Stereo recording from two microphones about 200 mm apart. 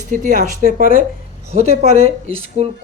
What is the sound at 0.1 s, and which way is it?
Speech, 40° right (ahead or behind).